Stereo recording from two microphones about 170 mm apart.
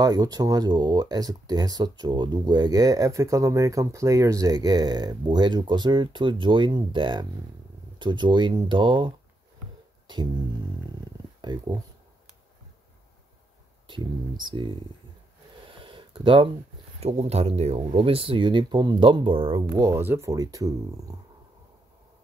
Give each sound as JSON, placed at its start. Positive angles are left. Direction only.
{"t": 0.0, "sound": "speech", "side_deg": -20}
{"t": 10.1, "sound": "music", "side_deg": -25}
{"t": 11.4, "sound": "speech", "side_deg": -25}
{"t": 14.4, "sound": "speech", "side_deg": -30}
{"t": 15.8, "sound": "a sound", "side_deg": -30}
{"t": 17.0, "sound": "speech", "side_deg": -40}